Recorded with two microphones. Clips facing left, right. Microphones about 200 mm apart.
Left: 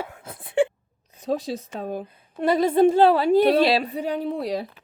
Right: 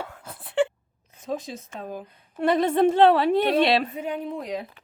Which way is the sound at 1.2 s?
35° left (ahead or behind).